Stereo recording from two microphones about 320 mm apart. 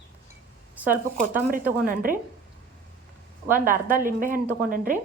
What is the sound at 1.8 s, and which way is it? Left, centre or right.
Speech, right.